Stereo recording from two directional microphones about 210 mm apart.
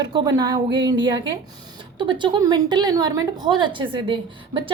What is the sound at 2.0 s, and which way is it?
Speech, 20° right (ahead or behind).